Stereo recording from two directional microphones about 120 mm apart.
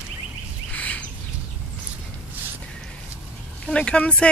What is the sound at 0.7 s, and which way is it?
Bird, 10° left (ahead or behind).